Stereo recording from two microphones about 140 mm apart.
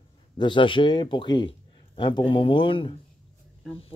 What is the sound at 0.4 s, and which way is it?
Speech, 35° left (ahead or behind).